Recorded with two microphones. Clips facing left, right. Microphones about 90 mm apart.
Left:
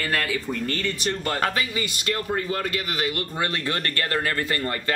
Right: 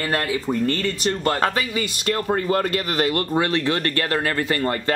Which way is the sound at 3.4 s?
25° right (ahead or behind).